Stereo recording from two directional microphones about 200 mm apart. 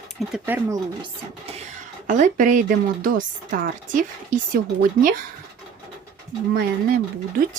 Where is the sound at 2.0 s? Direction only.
40° right (ahead or behind).